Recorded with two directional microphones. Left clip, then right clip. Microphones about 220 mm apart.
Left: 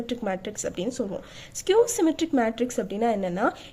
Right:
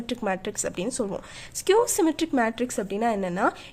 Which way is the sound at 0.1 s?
25° right (ahead or behind).